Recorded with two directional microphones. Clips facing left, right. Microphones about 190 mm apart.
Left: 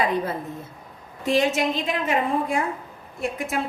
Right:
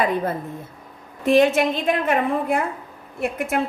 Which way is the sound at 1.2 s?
55° right (ahead or behind).